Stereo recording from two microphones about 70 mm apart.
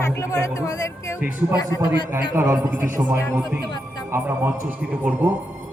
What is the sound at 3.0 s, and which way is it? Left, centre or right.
Speech, right.